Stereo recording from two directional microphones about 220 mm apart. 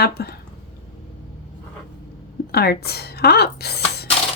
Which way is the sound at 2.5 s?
45° left (ahead or behind).